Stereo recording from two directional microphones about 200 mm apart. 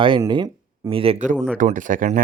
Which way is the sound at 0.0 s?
25° right (ahead or behind).